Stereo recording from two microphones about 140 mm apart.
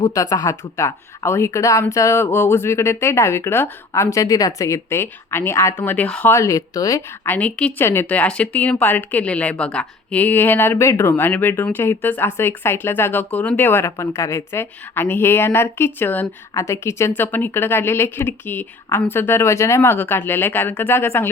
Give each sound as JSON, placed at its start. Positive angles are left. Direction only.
{"t": 0.0, "sound": "speech", "side_deg": 25}
{"t": 7.3, "sound": "speech", "side_deg": 10}